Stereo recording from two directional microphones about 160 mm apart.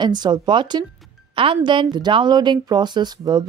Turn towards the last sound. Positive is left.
turn(degrees=-25)  # may be behind; listen again after turning